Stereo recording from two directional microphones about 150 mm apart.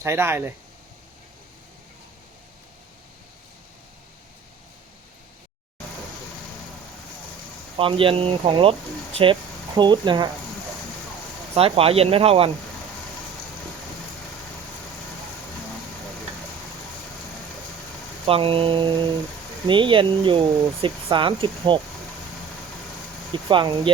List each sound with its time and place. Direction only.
0.0 s speech: 15° right (ahead or behind)
7.8 s speech: 35° right (ahead or behind)
11.5 s speech: 40° right (ahead or behind)
18.3 s speech: 40° right (ahead or behind)
23.5 s speech: 35° right (ahead or behind)